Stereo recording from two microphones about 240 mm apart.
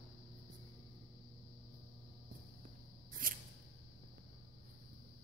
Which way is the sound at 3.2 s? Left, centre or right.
Right.